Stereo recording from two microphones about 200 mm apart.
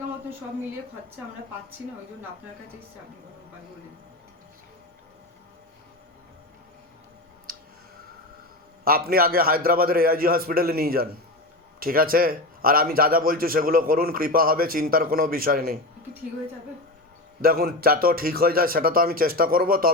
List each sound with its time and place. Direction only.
7.5 s clicking: 45° right (ahead or behind)
8.8 s a man's voice: 50° right (ahead or behind)
17.4 s a man's voice: 50° right (ahead or behind)